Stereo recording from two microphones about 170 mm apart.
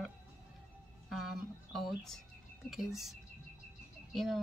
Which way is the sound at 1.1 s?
Centre (ahead or behind).